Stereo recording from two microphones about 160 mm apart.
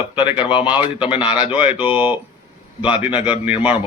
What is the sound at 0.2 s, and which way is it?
A man's voice, 30° left (ahead or behind).